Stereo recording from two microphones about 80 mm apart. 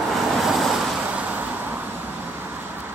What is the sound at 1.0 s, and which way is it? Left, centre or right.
Vehicle, centre.